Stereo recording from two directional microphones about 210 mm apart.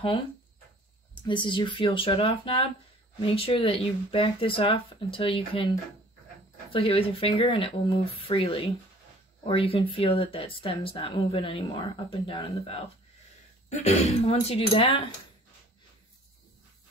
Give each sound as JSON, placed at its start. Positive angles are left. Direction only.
{"t": 1.2, "sound": "speech", "side_deg": 20}
{"t": 6.7, "sound": "speech", "side_deg": 25}